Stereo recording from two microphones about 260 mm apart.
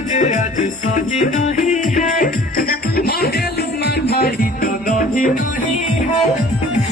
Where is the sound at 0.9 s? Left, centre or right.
Left.